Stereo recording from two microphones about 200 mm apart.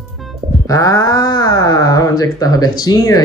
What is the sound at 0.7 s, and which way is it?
Speech, 15° left (ahead or behind).